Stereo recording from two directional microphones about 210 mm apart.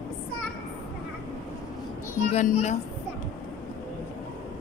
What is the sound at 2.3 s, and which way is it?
Speech, 35° left (ahead or behind).